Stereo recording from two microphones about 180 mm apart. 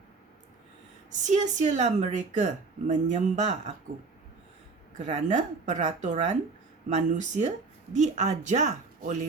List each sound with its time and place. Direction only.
1.2 s a woman's voice: 45° right (ahead or behind)
4.9 s a woman's voice: 40° right (ahead or behind)